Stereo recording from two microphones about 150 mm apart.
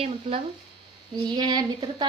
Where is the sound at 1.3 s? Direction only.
30° right (ahead or behind).